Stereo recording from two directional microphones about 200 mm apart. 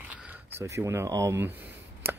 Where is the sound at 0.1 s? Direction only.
10° right (ahead or behind).